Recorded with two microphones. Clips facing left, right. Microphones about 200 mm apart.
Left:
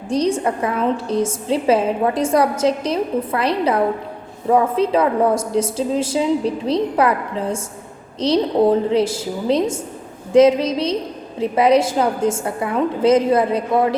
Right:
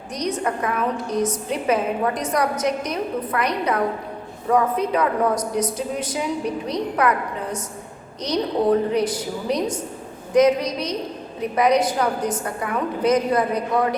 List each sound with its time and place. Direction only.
0.1 s a woman's voice: 30° left (ahead or behind)